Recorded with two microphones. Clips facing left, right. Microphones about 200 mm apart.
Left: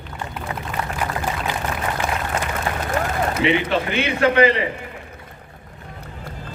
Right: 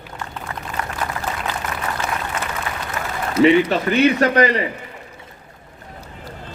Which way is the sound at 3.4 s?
40° right (ahead or behind).